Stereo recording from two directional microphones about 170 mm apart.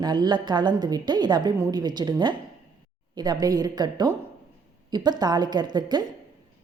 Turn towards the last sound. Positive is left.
turn(degrees=-25)  # may be behind; listen again after turning